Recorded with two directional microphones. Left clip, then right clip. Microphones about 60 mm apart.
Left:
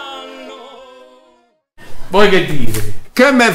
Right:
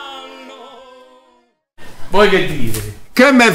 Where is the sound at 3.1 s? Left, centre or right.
Centre.